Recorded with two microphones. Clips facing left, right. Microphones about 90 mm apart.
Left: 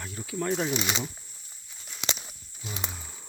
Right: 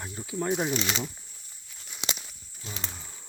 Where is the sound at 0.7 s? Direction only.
5° left (ahead or behind).